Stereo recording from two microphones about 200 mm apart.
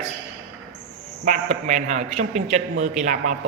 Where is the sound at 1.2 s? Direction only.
35° right (ahead or behind).